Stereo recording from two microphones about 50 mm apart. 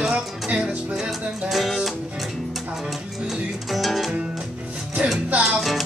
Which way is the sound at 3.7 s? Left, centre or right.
Centre.